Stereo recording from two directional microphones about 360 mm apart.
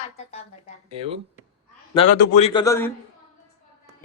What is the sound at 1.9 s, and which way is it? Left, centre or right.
A man's voice, centre.